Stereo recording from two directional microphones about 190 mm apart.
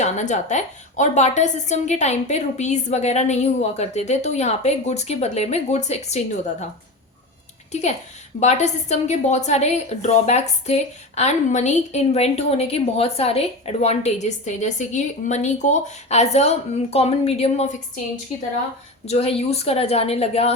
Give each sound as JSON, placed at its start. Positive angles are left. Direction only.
{"t": 0.0, "sound": "a woman's voice", "side_deg": 40}
{"t": 7.7, "sound": "a woman's voice", "side_deg": 35}
{"t": 19.0, "sound": "a woman's voice", "side_deg": 35}